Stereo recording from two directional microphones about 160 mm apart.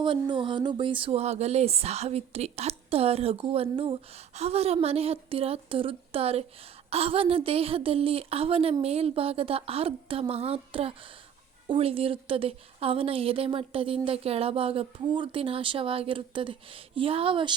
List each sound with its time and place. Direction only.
0.0 s speech: 30° right (ahead or behind)